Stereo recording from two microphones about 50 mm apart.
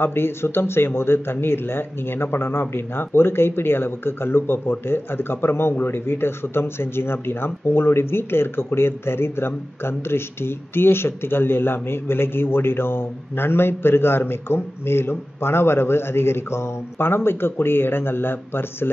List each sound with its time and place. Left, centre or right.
0.0 s speech: left